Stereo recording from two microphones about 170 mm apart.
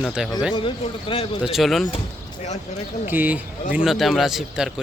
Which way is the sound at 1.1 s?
30° left (ahead or behind).